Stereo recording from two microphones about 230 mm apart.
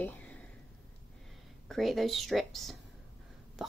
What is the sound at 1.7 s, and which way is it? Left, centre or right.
A woman's voice, centre.